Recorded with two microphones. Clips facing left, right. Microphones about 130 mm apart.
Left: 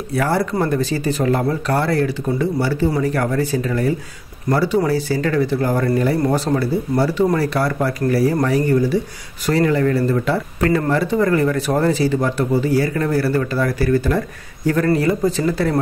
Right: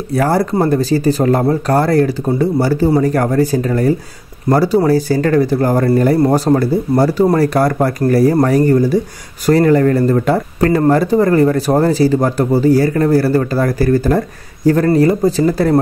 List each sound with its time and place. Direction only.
0.1 s speech: 40° right (ahead or behind)